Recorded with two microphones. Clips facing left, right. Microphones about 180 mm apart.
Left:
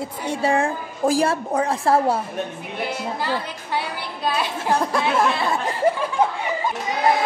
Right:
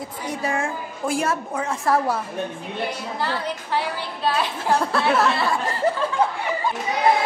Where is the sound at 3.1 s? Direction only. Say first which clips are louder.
Even; 15° left (ahead or behind).